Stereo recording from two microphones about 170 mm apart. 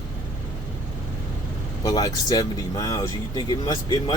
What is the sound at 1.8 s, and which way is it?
Speech, 20° left (ahead or behind).